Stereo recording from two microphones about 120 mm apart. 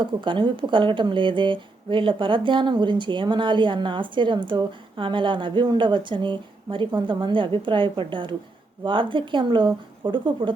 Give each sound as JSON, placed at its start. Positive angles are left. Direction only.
{"t": 0.0, "sound": "speech", "side_deg": -40}